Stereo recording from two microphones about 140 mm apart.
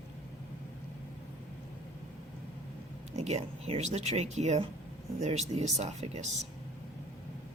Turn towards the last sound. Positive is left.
turn(degrees=-50)  # may be behind; listen again after turning